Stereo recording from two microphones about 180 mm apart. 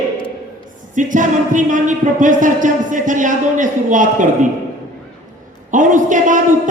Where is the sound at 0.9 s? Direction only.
45° right (ahead or behind).